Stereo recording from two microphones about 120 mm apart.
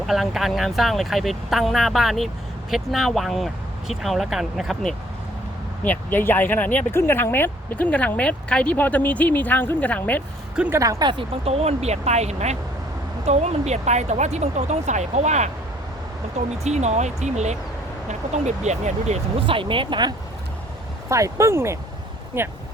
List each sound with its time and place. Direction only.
0.0 s speech: centre (ahead or behind)
5.8 s speech: 15° left (ahead or behind)
10.7 s speech: 30° right (ahead or behind)
11.4 s speech: 60° right (ahead or behind)
16.6 s speech: 70° right (ahead or behind)
19.5 s speech: 45° right (ahead or behind)
21.1 s speech: 25° right (ahead or behind)